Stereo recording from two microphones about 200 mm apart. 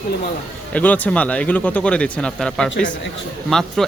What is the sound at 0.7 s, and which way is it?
Speech, 10° left (ahead or behind).